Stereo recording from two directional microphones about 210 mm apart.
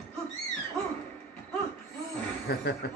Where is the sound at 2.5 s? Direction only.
50° left (ahead or behind).